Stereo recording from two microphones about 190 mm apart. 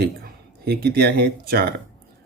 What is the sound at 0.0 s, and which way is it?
Speech, 55° right (ahead or behind).